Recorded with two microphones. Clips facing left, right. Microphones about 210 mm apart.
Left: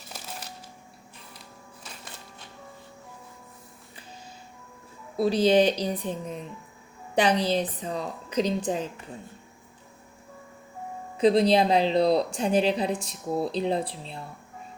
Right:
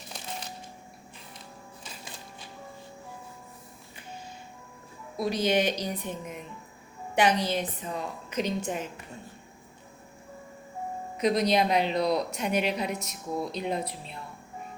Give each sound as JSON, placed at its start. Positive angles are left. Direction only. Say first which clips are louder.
{"t": 5.1, "sound": "a woman's voice", "louder": "left 6 dB", "side_deg": 30}
{"t": 7.4, "sound": "a woman's voice", "louder": "left 4 dB", "side_deg": 35}
{"t": 11.2, "sound": "a woman's voice", "louder": "left 5 dB", "side_deg": 30}